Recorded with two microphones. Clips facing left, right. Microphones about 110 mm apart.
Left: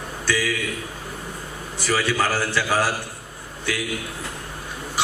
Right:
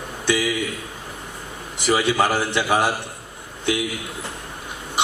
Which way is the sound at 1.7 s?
20° right (ahead or behind).